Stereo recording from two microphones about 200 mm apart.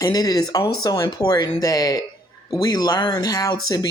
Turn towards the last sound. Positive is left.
turn(degrees=20)  # may be behind; listen again after turning